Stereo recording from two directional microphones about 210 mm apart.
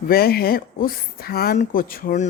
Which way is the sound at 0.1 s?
45° left (ahead or behind).